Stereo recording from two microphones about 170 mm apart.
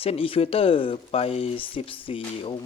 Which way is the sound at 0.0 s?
35° left (ahead or behind).